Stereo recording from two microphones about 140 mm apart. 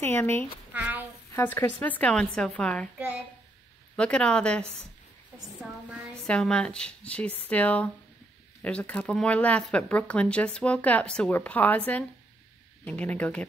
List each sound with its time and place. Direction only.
0.0 s speech: 15° left (ahead or behind)
0.7 s a sound: 10° right (ahead or behind)
1.3 s speech: 15° left (ahead or behind)
3.9 s speech: 5° left (ahead or behind)
5.6 s child singing: 5° right (ahead or behind)
6.2 s speech: 5° left (ahead or behind)